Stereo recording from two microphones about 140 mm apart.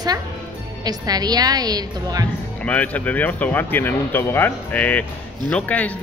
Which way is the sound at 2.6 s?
10° left (ahead or behind).